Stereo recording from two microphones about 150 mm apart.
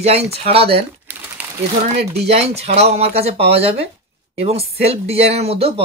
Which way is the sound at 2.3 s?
45° right (ahead or behind).